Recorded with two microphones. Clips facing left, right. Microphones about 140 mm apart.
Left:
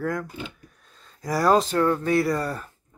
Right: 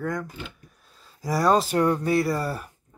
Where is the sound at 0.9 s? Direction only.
5° right (ahead or behind).